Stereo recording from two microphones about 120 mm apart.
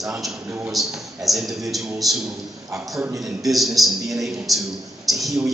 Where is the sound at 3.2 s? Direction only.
Centre (ahead or behind).